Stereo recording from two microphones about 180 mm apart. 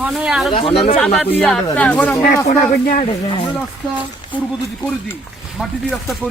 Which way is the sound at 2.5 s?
35° left (ahead or behind).